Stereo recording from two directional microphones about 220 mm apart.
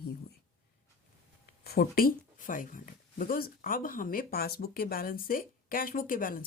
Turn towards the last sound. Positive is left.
turn(degrees=40)  # may be behind; listen again after turning